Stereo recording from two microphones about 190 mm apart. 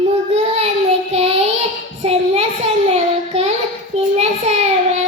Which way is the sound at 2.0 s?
30° right (ahead or behind).